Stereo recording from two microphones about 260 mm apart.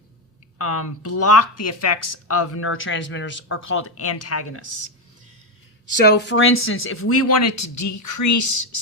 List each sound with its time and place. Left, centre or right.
0.6 s speech: left
6.1 s speech: left